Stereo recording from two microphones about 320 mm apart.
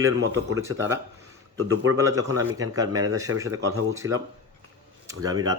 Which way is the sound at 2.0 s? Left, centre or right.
Centre.